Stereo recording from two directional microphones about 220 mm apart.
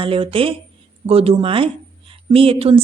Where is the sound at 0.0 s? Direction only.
25° right (ahead or behind).